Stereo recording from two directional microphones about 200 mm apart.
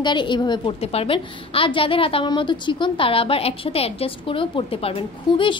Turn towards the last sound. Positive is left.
turn(degrees=25)  # may be behind; listen again after turning